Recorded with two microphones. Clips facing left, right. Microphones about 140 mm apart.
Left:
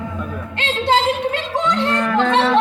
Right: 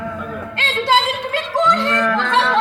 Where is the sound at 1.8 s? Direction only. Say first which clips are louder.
Left 1 dB; 25° left (ahead or behind).